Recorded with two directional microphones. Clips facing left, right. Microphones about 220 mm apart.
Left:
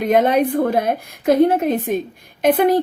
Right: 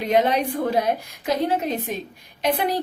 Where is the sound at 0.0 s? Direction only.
50° left (ahead or behind).